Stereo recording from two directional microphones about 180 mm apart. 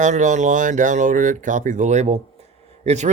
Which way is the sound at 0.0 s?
45° right (ahead or behind).